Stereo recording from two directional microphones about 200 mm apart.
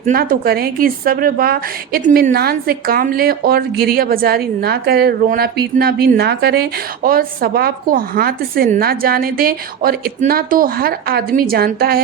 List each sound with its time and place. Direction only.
0.0 s a woman's voice: 45° right (ahead or behind)